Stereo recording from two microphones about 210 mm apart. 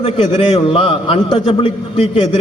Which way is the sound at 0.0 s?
25° left (ahead or behind).